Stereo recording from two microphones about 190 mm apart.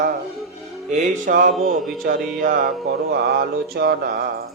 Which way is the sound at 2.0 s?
50° right (ahead or behind).